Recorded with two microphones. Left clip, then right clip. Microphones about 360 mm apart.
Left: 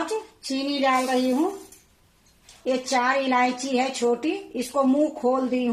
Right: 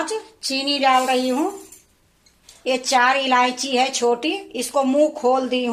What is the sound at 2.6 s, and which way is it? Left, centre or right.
A woman's voice, right.